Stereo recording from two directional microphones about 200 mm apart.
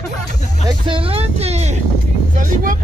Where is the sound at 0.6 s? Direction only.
25° right (ahead or behind).